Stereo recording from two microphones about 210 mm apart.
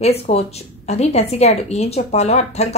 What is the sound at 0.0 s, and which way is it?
Speech, 30° left (ahead or behind).